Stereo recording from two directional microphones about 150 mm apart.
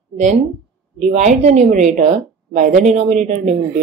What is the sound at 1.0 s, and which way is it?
A woman's voice, 50° right (ahead or behind).